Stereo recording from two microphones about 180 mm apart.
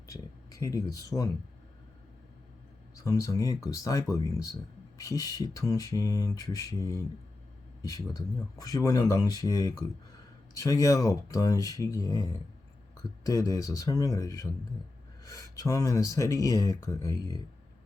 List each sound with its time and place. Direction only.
0.1 s speech: 20° left (ahead or behind)
2.9 s speech: 20° left (ahead or behind)